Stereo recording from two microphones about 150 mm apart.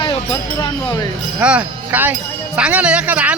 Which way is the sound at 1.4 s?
10° right (ahead or behind).